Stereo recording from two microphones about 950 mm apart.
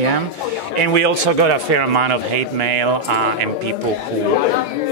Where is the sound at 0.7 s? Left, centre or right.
Right.